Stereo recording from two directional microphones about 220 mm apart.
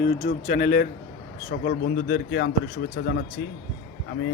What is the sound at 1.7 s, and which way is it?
Speech, 55° left (ahead or behind).